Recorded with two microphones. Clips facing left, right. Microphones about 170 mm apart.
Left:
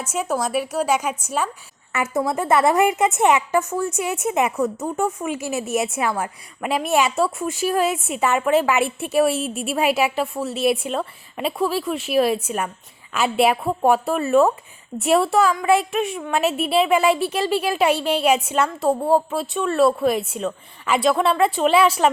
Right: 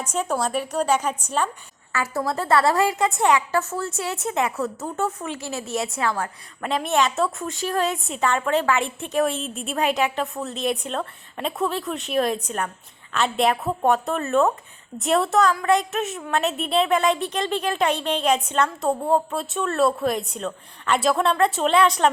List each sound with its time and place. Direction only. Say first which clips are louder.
0.1 s a woman's voice: left 2 dB; 10° left (ahead or behind)
1.9 s a woman's voice: left 3 dB; 20° left (ahead or behind); by 22.1 s 5° left (ahead or behind)